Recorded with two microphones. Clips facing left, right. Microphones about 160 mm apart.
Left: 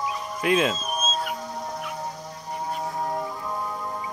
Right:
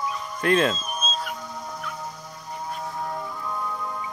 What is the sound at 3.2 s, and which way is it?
Music, 25° left (ahead or behind).